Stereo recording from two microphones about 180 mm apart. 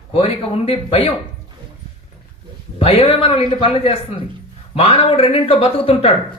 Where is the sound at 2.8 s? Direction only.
35° left (ahead or behind).